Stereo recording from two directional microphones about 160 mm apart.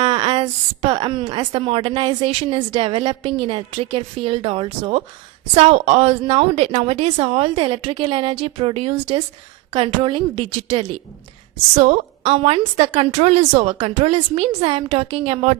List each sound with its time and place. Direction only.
0.0 s a woman's voice: 30° right (ahead or behind)
11.7 s a woman's voice: 45° right (ahead or behind)